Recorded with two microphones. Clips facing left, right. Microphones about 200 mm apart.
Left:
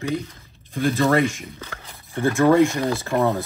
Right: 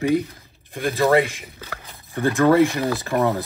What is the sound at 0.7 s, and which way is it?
Speech, 15° right (ahead or behind).